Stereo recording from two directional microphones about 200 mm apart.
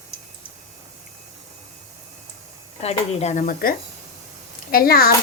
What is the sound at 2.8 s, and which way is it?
Speech, 30° left (ahead or behind).